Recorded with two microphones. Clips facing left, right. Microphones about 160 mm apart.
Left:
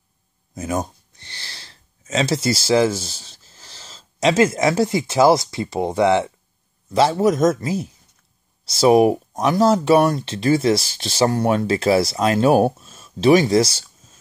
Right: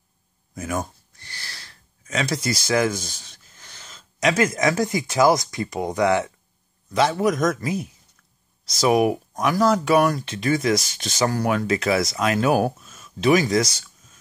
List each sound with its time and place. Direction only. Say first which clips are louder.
0.6 s speech: left 3 dB; 20° left (ahead or behind)